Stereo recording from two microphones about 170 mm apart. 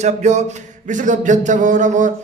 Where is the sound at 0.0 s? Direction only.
40° right (ahead or behind).